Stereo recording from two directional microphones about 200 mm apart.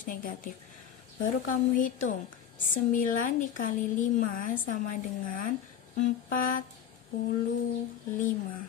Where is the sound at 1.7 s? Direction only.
40° left (ahead or behind).